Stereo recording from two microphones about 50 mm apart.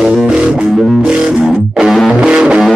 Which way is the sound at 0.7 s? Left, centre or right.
Centre.